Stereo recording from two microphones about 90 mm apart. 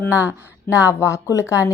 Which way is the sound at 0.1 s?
35° left (ahead or behind).